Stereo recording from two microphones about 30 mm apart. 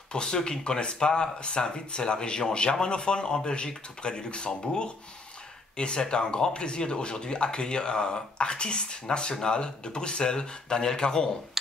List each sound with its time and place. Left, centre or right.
0.1 s speech: left